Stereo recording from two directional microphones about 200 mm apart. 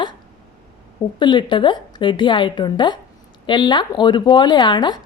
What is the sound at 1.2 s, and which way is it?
Speech, 25° left (ahead or behind).